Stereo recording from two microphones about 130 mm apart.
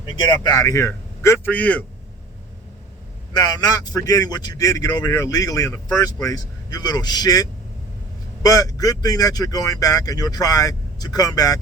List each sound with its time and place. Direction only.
0.2 s speech: 35° left (ahead or behind); by 1.8 s 10° left (ahead or behind)
3.3 s speech: 30° left (ahead or behind)